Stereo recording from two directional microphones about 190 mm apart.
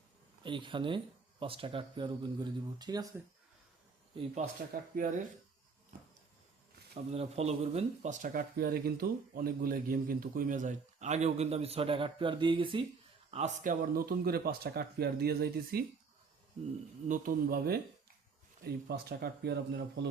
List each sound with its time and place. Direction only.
0.4 s speech: 25° right (ahead or behind)
4.1 s speech: 25° right (ahead or behind)
4.7 s speech: 45° right (ahead or behind)
7.1 s speech: 35° right (ahead or behind)
13.3 s speech: 40° right (ahead or behind); by 15.8 s 55° right (ahead or behind)
17.1 s speech: 50° right (ahead or behind)